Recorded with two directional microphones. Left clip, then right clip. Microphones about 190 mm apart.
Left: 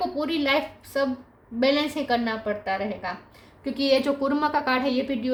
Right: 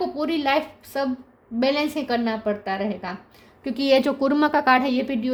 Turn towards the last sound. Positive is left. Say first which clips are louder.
# right 1 dB
turn(degrees=-45)  # may be behind; listen again after turning